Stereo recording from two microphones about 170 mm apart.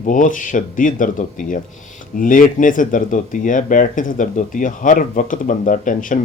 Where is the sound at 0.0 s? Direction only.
50° left (ahead or behind).